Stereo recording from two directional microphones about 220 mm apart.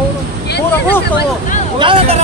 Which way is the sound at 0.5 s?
50° left (ahead or behind).